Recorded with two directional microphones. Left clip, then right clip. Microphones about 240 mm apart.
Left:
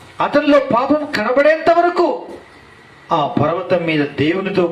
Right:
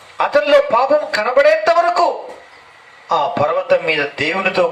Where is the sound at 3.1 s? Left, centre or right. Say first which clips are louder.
Right 1 dB; right.